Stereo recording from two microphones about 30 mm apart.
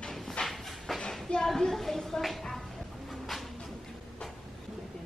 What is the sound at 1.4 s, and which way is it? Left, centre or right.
Speech, centre.